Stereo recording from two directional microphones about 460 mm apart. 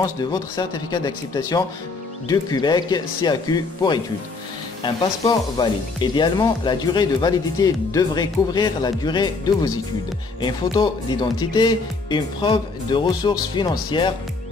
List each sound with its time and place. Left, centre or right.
0.0 s speech: centre